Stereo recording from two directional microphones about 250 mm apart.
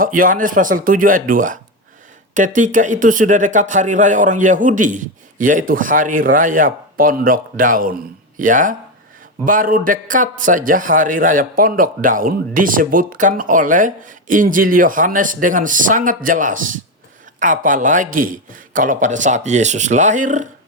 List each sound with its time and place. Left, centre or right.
0.0 s a man's voice: right